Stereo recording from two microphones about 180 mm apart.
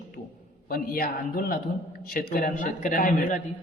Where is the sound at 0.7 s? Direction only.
55° left (ahead or behind).